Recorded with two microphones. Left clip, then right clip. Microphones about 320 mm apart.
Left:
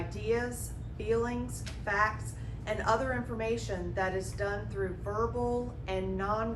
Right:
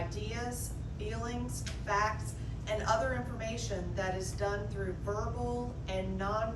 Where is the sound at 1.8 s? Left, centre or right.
Centre.